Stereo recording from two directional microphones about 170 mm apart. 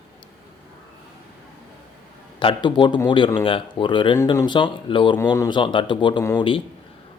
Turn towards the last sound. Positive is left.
turn(degrees=30)  # may be behind; listen again after turning